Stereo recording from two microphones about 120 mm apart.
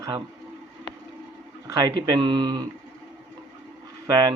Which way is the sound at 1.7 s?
30° right (ahead or behind).